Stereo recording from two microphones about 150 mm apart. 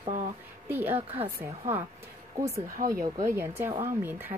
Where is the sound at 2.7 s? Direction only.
70° right (ahead or behind).